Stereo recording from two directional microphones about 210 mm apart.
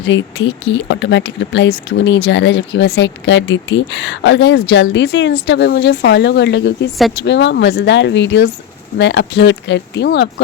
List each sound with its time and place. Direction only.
0.0 s speech: 60° left (ahead or behind)